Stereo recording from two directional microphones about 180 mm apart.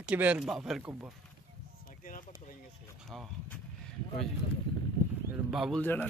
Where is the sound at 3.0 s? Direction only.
Centre (ahead or behind).